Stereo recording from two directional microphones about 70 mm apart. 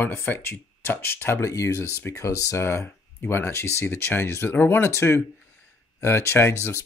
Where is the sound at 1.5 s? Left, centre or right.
Left.